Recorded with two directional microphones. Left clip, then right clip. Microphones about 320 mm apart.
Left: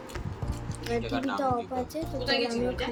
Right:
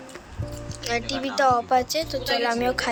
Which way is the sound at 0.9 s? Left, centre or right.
Centre.